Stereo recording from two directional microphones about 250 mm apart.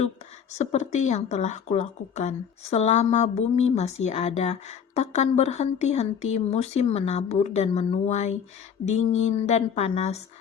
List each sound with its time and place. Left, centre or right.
0.6 s speech: left